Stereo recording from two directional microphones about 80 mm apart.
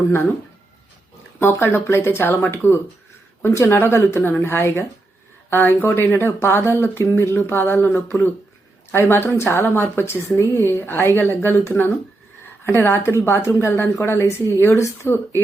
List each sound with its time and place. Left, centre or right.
1.4 s speech: left